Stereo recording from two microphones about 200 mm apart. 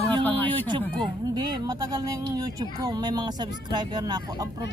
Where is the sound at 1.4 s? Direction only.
20° right (ahead or behind).